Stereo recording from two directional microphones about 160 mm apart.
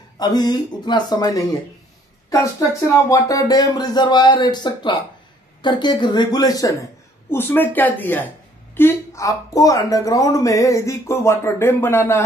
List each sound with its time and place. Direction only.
0.2 s speech: 25° left (ahead or behind)
2.2 s a sound: 20° left (ahead or behind)
3.1 s speech: 20° left (ahead or behind)